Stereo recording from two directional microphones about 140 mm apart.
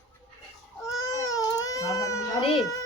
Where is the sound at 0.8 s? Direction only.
25° left (ahead or behind).